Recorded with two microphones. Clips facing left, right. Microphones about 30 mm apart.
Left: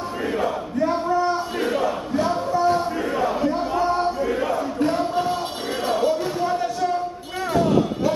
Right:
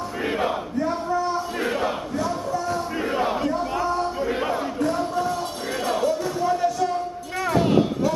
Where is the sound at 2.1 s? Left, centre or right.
Left.